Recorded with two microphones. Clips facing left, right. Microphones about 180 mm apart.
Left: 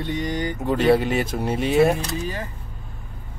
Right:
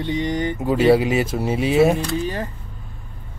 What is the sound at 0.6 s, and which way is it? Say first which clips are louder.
Speech: right 3 dB; 5° right (ahead or behind).